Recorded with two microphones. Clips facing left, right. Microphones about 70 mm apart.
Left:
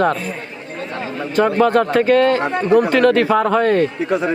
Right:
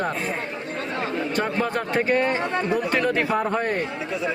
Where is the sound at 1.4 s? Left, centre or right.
Left.